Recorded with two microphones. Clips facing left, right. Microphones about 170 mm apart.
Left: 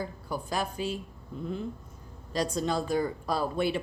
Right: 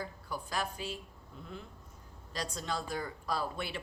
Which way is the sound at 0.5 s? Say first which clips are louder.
Left 6 dB; 15° left (ahead or behind).